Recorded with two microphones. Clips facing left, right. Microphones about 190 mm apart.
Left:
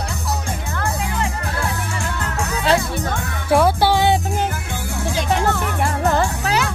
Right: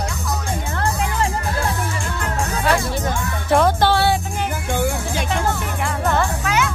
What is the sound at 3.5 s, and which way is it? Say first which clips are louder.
Music: left 1 dB; 10° left (ahead or behind).